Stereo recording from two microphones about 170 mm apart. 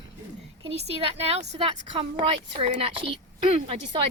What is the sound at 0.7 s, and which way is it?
A woman's voice, 35° right (ahead or behind).